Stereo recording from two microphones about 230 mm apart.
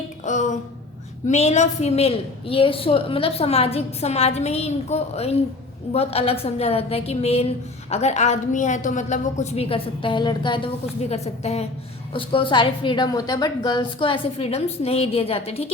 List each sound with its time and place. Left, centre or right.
0.3 s music: left
1.3 s a woman's voice: left